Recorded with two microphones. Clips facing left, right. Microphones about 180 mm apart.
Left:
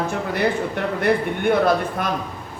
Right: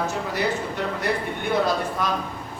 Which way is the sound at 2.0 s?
55° left (ahead or behind).